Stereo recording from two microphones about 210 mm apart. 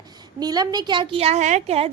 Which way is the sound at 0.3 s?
20° right (ahead or behind).